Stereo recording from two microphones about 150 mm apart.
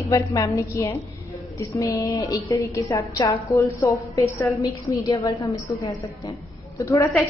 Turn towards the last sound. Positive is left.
turn(degrees=20)  # may be behind; listen again after turning